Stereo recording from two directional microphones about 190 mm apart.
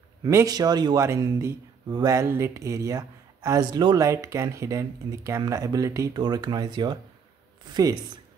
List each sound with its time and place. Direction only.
0.2 s speech: 15° right (ahead or behind)